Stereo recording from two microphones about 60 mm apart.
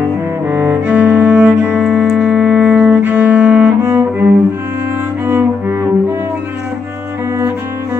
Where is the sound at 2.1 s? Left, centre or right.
Centre.